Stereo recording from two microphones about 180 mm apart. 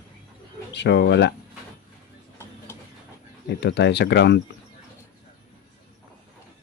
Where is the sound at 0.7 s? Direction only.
75° left (ahead or behind).